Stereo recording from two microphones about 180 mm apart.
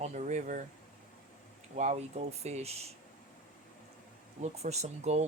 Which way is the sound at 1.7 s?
40° right (ahead or behind).